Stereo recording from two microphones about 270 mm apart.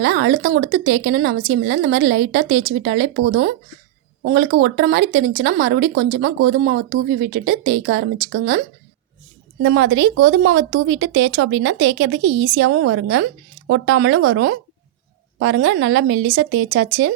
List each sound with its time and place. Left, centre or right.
0.0 s speech: right